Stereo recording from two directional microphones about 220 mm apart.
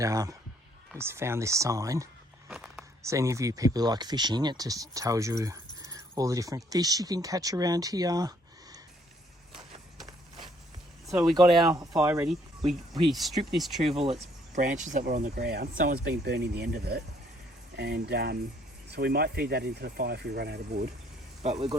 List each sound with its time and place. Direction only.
0.0 s speech: 15° right (ahead or behind)
2.5 s a sound: 5° right (ahead or behind)
3.0 s speech: 15° right (ahead or behind)
9.6 s a sound: 20° right (ahead or behind)
11.3 s speech: 20° right (ahead or behind); by 13.9 s centre (ahead or behind)
13.9 s speech: 25° right (ahead or behind)
14.6 s speech: 40° right (ahead or behind)
21.4 s speech: 25° right (ahead or behind)